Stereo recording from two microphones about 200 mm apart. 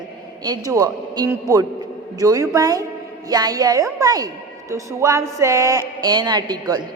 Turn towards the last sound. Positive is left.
turn(degrees=-20)  # may be behind; listen again after turning